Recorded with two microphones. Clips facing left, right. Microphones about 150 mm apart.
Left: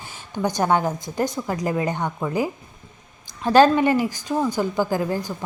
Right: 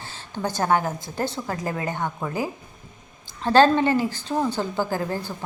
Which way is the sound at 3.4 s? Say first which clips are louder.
Left 2 dB; 15° left (ahead or behind).